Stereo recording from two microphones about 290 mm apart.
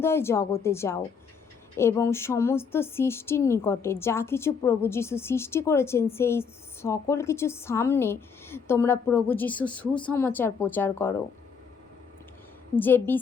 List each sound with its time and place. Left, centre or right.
0.0 s speech: centre
12.7 s speech: centre